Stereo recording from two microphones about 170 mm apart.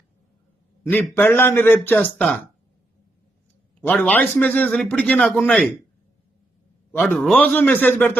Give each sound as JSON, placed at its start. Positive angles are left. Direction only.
{"t": 0.9, "sound": "a man's voice", "side_deg": 10}
{"t": 3.8, "sound": "a man's voice", "side_deg": 10}
{"t": 6.9, "sound": "a man's voice", "side_deg": 5}